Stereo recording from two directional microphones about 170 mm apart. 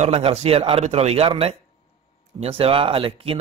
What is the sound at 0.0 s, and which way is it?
A man's voice, 35° right (ahead or behind).